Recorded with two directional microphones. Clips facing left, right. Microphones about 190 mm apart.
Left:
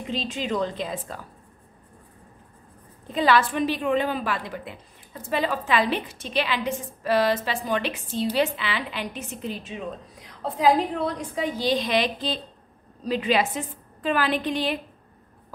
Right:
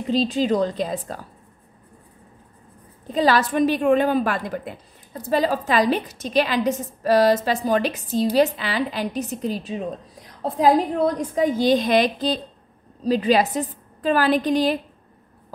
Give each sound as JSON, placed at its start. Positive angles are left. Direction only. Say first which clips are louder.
{"t": 0.1, "sound": "a woman's voice", "louder": "right 8 dB", "side_deg": -35}
{"t": 3.2, "sound": "a woman's voice", "louder": "right 3 dB", "side_deg": -40}